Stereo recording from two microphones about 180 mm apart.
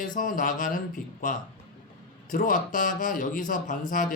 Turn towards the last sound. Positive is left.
turn(degrees=50)  # may be behind; listen again after turning